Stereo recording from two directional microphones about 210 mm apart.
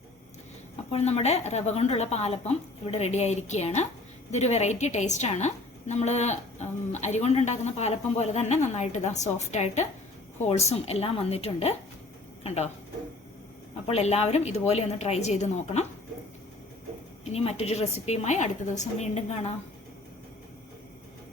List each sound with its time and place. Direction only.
0.9 s a woman's voice: 30° left (ahead or behind)
13.8 s a woman's voice: 30° left (ahead or behind)
17.2 s a woman's voice: 30° left (ahead or behind)